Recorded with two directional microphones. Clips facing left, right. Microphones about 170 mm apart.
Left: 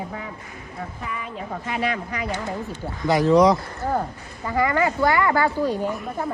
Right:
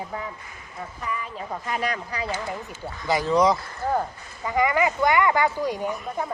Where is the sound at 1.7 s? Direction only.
40° right (ahead or behind).